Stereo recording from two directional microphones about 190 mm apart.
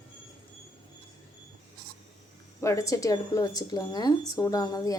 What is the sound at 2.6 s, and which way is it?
A woman's voice, 15° left (ahead or behind).